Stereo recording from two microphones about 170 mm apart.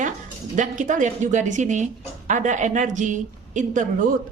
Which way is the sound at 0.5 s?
45° right (ahead or behind).